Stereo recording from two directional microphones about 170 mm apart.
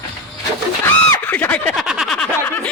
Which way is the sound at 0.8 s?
10° left (ahead or behind).